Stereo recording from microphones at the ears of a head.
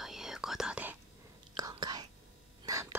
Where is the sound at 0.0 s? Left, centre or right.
Centre.